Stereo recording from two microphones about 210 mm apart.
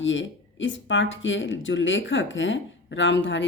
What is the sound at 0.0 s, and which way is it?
A woman's voice, 65° left (ahead or behind).